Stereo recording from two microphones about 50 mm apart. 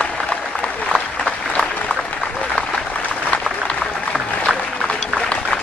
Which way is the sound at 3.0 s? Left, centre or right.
Left.